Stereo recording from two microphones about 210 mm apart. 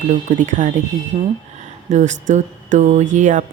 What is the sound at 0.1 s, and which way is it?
Speech, 35° right (ahead or behind).